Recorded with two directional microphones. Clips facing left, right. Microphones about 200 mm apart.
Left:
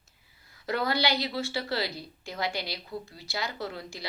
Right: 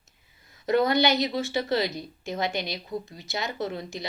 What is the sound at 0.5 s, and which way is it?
A woman's voice, 20° right (ahead or behind).